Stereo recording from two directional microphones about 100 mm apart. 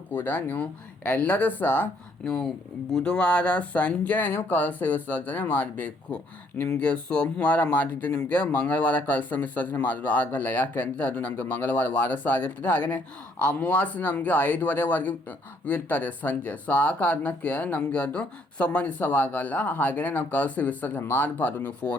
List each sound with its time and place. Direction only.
0.1 s speech: 15° left (ahead or behind)
2.2 s speech: 5° left (ahead or behind)